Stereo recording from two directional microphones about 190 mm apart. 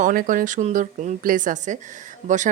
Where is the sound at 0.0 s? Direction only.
45° right (ahead or behind).